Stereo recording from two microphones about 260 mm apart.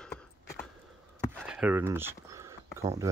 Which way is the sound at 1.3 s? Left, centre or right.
Centre.